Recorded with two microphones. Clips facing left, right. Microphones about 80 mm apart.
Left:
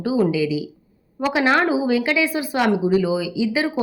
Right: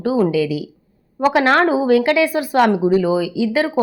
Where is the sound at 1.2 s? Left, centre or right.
Right.